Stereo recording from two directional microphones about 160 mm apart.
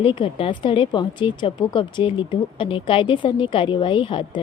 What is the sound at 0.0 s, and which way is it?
A woman's voice, 35° left (ahead or behind).